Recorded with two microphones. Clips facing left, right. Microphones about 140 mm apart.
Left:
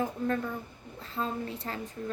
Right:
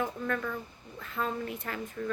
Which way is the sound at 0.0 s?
30° left (ahead or behind).